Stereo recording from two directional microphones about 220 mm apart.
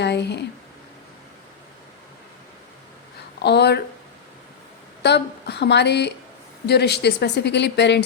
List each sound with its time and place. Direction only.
0.0 s speech: 50° left (ahead or behind)
3.4 s speech: 50° left (ahead or behind)
5.0 s speech: 50° left (ahead or behind)